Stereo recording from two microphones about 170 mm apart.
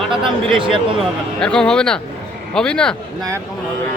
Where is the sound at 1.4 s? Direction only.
5° left (ahead or behind).